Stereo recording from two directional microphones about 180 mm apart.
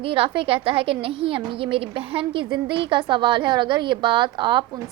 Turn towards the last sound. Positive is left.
turn(degrees=-25)  # may be behind; listen again after turning